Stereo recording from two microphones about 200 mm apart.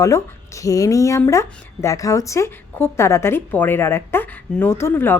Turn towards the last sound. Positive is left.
turn(degrees=10)  # may be behind; listen again after turning